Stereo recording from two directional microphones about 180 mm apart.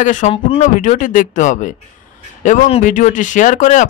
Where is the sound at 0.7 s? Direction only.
45° left (ahead or behind).